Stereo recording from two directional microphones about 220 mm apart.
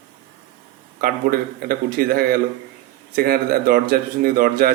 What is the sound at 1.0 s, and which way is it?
Speech, 40° right (ahead or behind).